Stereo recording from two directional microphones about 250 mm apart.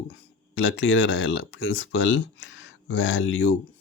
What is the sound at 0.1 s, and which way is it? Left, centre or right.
Speech, left.